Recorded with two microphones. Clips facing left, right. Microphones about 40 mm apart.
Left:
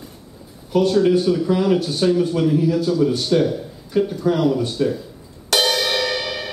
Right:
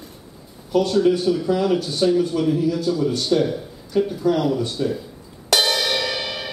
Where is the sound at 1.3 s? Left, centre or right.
Centre.